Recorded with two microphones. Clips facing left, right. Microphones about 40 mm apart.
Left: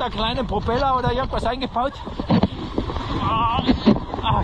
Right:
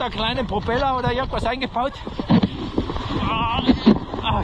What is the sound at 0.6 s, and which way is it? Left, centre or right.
Speech, right.